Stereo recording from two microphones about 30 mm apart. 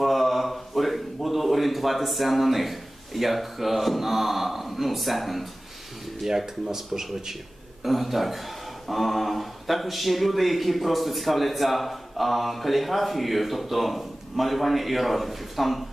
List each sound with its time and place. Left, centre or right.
0.0 s a sound: centre
6.2 s speech: centre
7.9 s speech: centre